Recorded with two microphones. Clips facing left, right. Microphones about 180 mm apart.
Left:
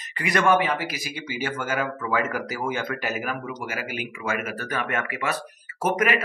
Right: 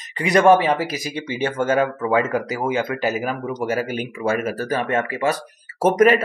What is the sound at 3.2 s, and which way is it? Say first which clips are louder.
Speech: right 6 dB; 35° right (ahead or behind).